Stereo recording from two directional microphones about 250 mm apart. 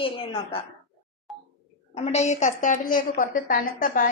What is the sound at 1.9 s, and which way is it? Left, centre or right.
A woman's voice, left.